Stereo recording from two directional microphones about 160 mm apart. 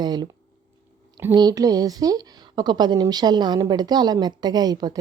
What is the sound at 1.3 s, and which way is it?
Speech, 25° right (ahead or behind).